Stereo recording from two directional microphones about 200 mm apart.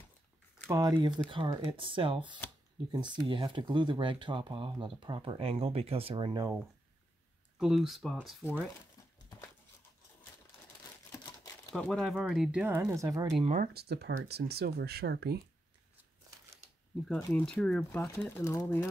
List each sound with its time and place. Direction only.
0.7 s speech: 20° right (ahead or behind)
7.5 s speech: centre (ahead or behind)
11.1 s crumpling: 15° left (ahead or behind)
11.7 s speech: 5° left (ahead or behind); by 13.3 s 15° right (ahead or behind)
13.4 s speech: 35° right (ahead or behind)
13.7 s speech: 55° right (ahead or behind)
17.3 s speech: 5° left (ahead or behind)